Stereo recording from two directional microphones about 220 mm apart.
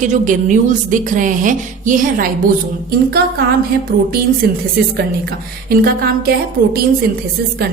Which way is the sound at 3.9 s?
40° right (ahead or behind).